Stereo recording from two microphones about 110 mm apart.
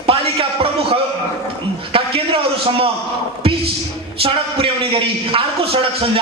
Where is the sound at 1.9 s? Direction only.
55° right (ahead or behind).